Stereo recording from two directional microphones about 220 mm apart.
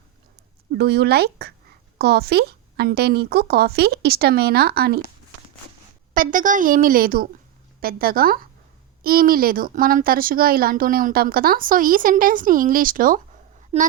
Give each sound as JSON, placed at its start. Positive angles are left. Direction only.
{"t": 0.7, "sound": "a woman's voice", "side_deg": -50}
{"t": 6.1, "sound": "speech", "side_deg": -35}
{"t": 13.7, "sound": "a woman's voice", "side_deg": -30}